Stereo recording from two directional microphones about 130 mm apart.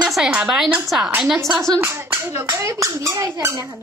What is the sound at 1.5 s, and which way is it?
Speech, 5° left (ahead or behind).